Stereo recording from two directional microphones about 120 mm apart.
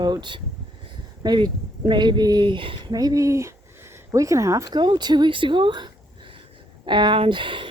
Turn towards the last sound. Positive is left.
turn(degrees=-40)  # may be behind; listen again after turning